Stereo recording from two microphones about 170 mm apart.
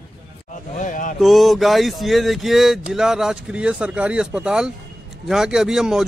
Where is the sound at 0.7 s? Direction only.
50° left (ahead or behind).